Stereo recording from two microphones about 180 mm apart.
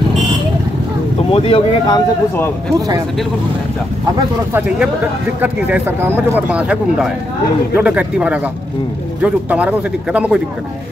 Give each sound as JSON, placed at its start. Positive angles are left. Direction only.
{"t": 1.3, "sound": "speech", "side_deg": 25}
{"t": 5.4, "sound": "speech", "side_deg": -10}